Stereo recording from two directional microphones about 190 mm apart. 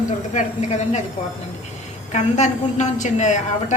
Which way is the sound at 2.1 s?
40° left (ahead or behind).